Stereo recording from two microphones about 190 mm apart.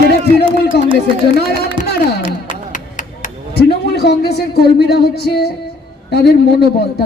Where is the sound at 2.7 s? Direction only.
40° left (ahead or behind).